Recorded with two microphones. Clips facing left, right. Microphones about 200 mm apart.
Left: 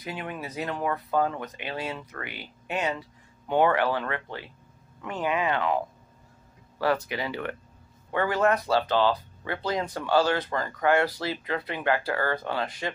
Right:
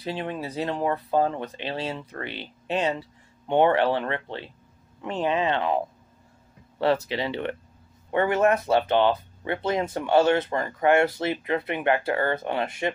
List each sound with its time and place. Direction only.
0.0 s speech: 30° right (ahead or behind)